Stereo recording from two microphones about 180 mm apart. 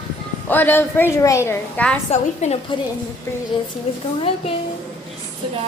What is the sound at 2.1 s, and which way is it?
Speech, 35° left (ahead or behind).